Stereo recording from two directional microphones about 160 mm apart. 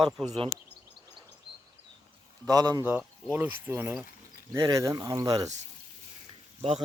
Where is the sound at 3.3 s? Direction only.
15° right (ahead or behind).